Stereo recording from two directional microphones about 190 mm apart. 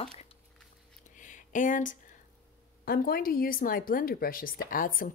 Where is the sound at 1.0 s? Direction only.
40° left (ahead or behind).